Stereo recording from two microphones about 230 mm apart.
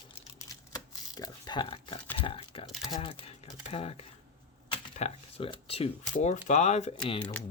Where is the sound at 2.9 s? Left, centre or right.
Left.